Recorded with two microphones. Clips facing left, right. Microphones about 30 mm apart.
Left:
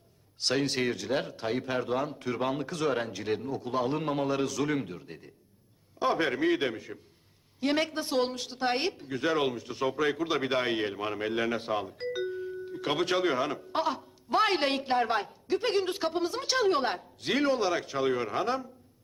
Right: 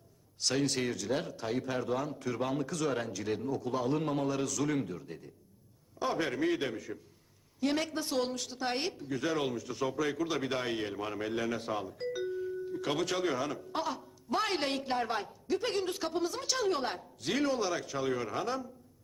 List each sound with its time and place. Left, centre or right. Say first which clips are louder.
0.3 s speech: left 3 dB; left